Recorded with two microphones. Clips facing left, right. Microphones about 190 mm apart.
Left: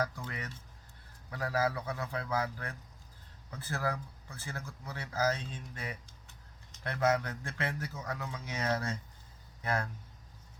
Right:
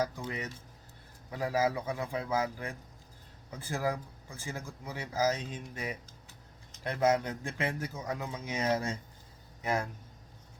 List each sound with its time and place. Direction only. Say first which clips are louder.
0.0 s speech: right 3 dB; 20° right (ahead or behind)